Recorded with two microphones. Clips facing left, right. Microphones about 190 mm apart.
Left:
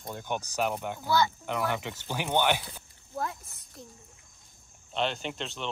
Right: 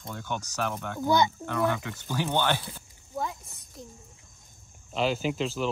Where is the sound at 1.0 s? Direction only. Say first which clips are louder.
Right 3 dB; 20° right (ahead or behind).